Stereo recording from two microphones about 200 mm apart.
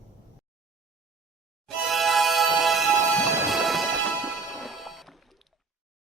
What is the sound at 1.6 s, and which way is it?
Music, centre (ahead or behind).